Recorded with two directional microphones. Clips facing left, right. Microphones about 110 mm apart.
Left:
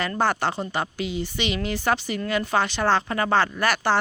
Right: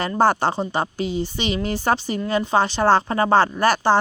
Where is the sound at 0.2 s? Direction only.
35° right (ahead or behind).